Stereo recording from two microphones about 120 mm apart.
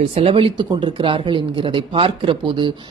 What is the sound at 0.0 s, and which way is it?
A woman's voice, 50° right (ahead or behind).